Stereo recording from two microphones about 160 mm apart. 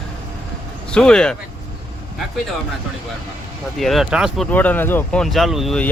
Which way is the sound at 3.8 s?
Centre (ahead or behind).